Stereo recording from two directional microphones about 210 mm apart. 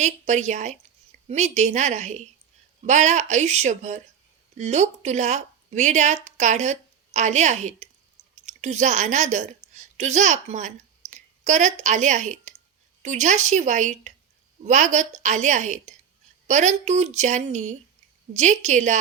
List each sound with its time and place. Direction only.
0.0 s a woman's voice: 35° right (ahead or behind)